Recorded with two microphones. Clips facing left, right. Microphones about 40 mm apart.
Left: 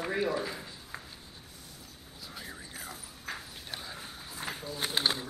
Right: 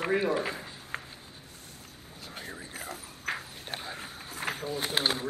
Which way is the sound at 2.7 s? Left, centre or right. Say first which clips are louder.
Right 3 dB; right.